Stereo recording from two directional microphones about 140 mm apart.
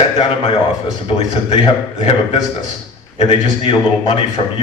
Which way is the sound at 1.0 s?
45° left (ahead or behind).